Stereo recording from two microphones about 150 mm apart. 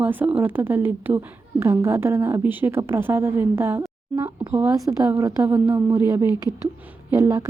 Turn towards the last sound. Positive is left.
turn(degrees=-20)  # may be behind; listen again after turning